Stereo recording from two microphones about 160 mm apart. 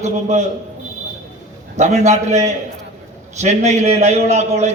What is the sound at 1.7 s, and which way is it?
A man's voice, 45° right (ahead or behind).